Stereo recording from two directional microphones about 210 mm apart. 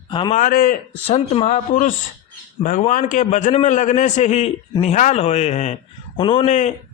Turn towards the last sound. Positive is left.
turn(degrees=35)  # may be behind; listen again after turning